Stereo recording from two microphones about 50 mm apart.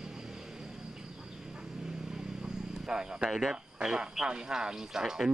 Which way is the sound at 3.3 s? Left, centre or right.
Centre.